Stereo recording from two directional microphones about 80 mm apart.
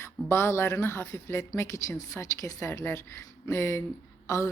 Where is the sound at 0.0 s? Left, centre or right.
Left.